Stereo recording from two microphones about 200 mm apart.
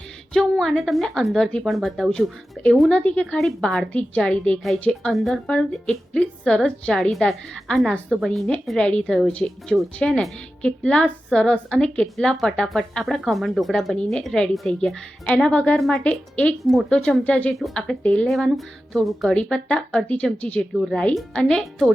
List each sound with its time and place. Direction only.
0.3 s a woman's voice: 5° left (ahead or behind)